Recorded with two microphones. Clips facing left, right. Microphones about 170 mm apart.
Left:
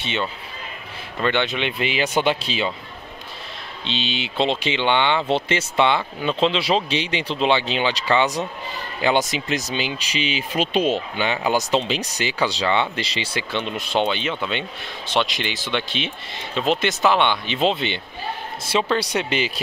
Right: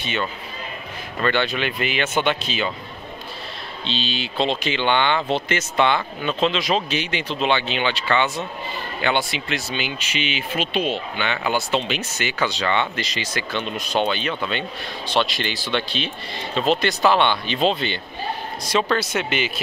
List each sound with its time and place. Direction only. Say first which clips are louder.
1.2 s speech: even; 20° left (ahead or behind)
3.8 s speech: even; 20° left (ahead or behind)